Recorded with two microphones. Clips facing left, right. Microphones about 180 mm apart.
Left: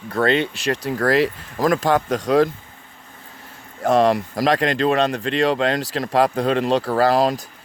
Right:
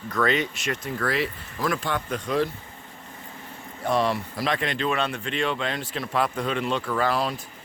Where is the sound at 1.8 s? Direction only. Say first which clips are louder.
Left 9 dB; 90° left.